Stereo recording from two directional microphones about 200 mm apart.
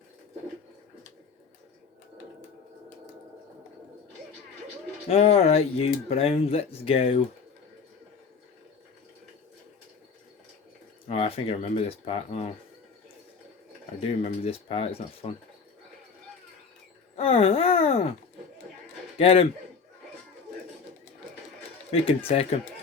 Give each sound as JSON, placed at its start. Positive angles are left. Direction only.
{"t": 5.0, "sound": "speech", "side_deg": 30}
{"t": 11.1, "sound": "speech", "side_deg": 30}
{"t": 14.4, "sound": "speech", "side_deg": 30}
{"t": 17.2, "sound": "speech", "side_deg": 30}
{"t": 19.1, "sound": "a man's voice", "side_deg": 30}
{"t": 21.9, "sound": "speech", "side_deg": 30}